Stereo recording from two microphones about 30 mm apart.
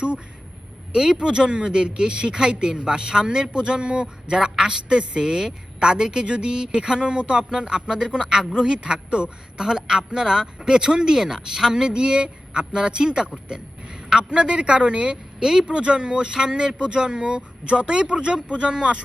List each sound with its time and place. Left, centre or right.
1.1 s speech: right
5.2 s speech: centre
6.2 s speech: right
6.5 s speech: right
9.6 s speech: right
14.3 s speech: right